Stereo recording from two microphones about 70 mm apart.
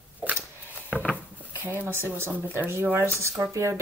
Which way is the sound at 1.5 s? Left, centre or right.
Right.